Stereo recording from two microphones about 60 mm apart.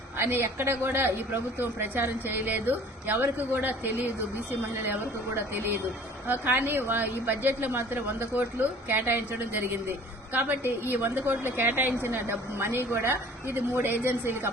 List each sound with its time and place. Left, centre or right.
0.2 s a woman's voice: right
5.4 s a woman's voice: right
8.4 s a woman's voice: right
12.0 s a woman's voice: right